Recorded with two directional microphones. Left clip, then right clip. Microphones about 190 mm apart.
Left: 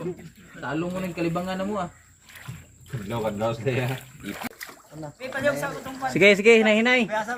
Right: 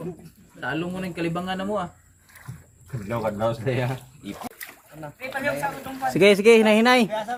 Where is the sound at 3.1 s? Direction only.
20° right (ahead or behind).